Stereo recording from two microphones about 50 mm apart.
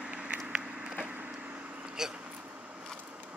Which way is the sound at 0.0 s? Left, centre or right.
Right.